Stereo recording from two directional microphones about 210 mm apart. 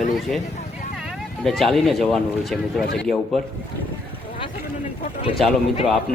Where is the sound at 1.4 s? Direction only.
Centre (ahead or behind).